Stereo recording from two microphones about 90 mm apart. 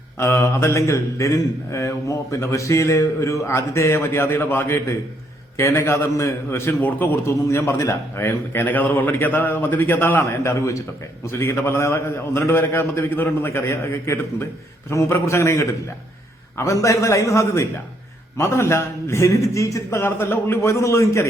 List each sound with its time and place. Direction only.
0.2 s a man's voice: 30° left (ahead or behind)
6.8 s a man's voice: 20° left (ahead or behind)